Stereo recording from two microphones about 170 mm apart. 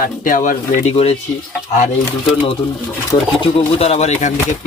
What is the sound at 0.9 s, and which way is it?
Speech, 35° left (ahead or behind).